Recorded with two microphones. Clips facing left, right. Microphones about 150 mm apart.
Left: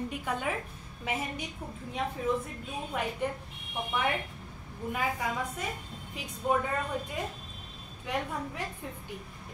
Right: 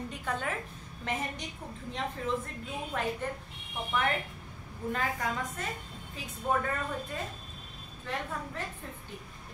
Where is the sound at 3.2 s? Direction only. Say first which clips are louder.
Left 3 dB; 15° left (ahead or behind).